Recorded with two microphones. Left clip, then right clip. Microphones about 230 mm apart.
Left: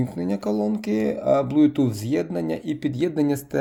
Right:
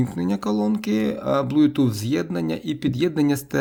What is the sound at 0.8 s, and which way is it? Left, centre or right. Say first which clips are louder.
Speech: even; right.